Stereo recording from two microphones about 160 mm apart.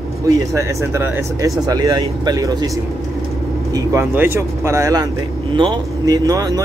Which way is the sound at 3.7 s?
15° right (ahead or behind).